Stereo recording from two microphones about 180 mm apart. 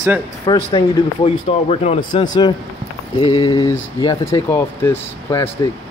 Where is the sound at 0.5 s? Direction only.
30° left (ahead or behind); by 5.5 s 15° left (ahead or behind).